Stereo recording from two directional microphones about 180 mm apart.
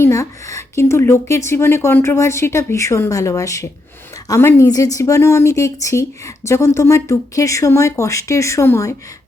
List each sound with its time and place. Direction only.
0.0 s a woman's voice: 15° left (ahead or behind)